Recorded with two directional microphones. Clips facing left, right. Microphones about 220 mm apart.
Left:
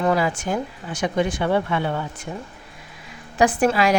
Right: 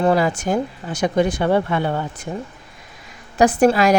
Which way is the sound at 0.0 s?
35° right (ahead or behind).